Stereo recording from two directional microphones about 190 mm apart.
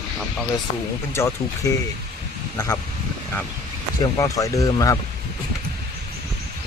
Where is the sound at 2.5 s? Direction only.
20° left (ahead or behind).